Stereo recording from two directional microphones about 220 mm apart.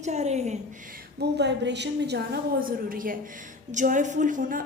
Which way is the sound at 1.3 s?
50° right (ahead or behind).